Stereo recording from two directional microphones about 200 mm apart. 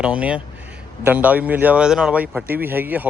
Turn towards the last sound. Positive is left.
turn(degrees=-10)  # may be behind; listen again after turning